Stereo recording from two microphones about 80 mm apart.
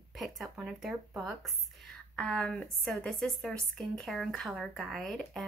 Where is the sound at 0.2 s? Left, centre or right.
Centre.